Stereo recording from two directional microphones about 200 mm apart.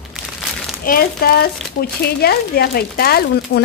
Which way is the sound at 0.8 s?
50° left (ahead or behind).